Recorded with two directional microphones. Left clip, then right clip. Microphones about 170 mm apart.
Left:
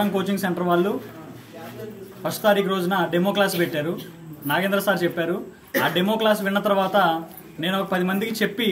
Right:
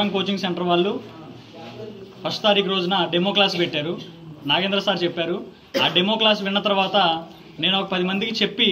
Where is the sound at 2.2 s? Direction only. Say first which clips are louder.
Right 1 dB; 30° left (ahead or behind).